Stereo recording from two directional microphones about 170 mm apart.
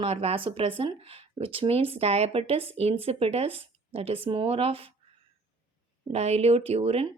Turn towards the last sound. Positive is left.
turn(degrees=-35)  # may be behind; listen again after turning